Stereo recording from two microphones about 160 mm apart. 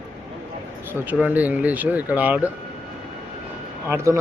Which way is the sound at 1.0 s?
10° right (ahead or behind).